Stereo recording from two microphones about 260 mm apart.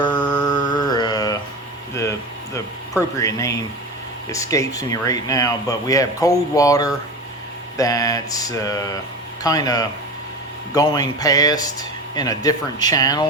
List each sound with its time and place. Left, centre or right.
0.1 s mantra: centre
1.9 s a sound: centre
3.2 s speech: centre